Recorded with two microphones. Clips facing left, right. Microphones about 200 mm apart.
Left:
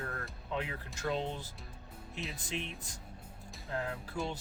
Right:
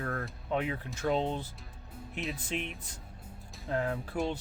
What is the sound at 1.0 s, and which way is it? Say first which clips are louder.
Speech: right 5 dB; 60° right (ahead or behind).